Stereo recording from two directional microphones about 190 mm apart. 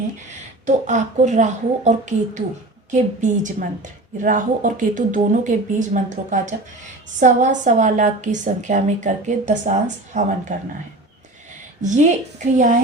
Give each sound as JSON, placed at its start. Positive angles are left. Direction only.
{"t": 0.6, "sound": "a woman's voice", "side_deg": -40}
{"t": 11.8, "sound": "a woman's voice", "side_deg": -40}